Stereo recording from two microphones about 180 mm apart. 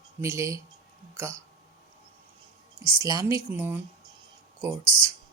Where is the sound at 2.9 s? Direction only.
20° right (ahead or behind).